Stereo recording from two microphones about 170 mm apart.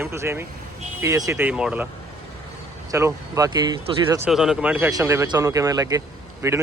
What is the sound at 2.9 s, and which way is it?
A man's voice, 15° right (ahead or behind).